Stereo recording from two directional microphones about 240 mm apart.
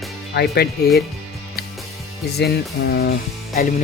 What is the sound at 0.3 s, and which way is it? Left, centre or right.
Speech, left.